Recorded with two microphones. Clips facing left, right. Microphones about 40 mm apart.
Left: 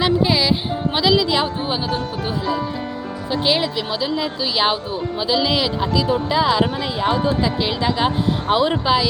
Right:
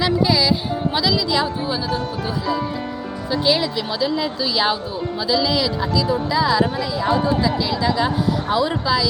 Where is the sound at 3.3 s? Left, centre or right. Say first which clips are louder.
Even; left.